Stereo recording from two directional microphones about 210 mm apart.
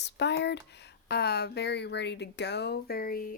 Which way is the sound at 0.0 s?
55° left (ahead or behind).